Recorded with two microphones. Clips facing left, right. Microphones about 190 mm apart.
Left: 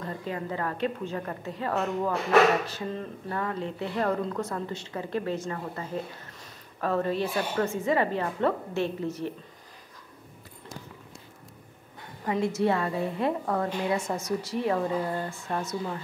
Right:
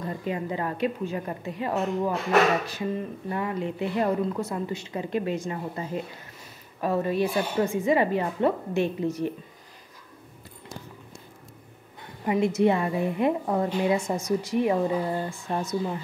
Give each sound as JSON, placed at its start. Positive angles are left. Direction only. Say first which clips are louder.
{"t": 0.0, "sound": "speech", "louder": "right 3 dB", "side_deg": -15}
{"t": 12.3, "sound": "speech", "louder": "right 4 dB", "side_deg": -15}